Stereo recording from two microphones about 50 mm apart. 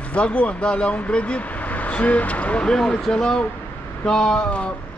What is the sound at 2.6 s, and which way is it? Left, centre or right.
A man's voice, centre.